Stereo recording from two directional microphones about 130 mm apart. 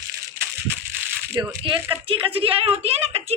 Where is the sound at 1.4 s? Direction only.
40° right (ahead or behind).